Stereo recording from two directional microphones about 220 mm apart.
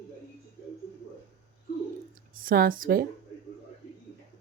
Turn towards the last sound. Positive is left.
turn(degrees=-40)  # may be behind; listen again after turning